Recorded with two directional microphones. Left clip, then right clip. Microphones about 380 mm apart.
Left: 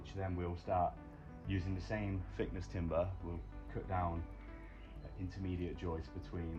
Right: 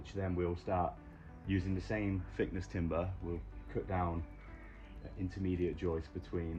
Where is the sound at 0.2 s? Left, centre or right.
Centre.